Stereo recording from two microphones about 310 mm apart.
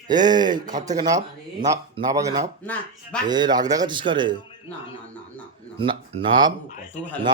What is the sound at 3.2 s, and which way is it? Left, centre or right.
Speech, centre.